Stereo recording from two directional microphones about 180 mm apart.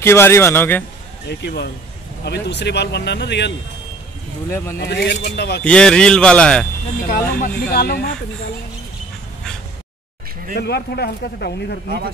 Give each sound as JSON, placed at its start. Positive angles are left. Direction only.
{"t": 0.0, "sound": "a man's voice", "side_deg": 15}
{"t": 1.3, "sound": "a man's voice", "side_deg": 65}
{"t": 4.7, "sound": "speech", "side_deg": 65}
{"t": 5.6, "sound": "a man's voice", "side_deg": 5}
{"t": 7.0, "sound": "speech", "side_deg": 45}
{"t": 10.5, "sound": "a man's voice", "side_deg": 65}